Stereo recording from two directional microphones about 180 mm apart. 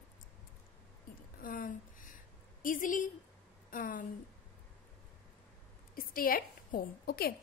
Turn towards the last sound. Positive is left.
turn(degrees=60)  # may be behind; listen again after turning